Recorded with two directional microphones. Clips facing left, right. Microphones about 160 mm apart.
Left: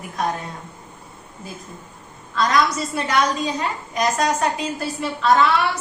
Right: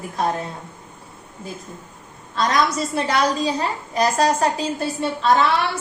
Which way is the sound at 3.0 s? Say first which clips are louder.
Right 1 dB; 30° right (ahead or behind).